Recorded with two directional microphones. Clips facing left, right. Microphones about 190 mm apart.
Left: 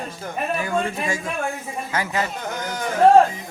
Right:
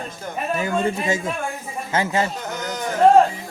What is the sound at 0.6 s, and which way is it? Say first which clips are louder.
A man's voice: right 2 dB; 20° right (ahead or behind).